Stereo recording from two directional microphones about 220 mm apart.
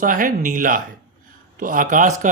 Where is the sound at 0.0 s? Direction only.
40° right (ahead or behind).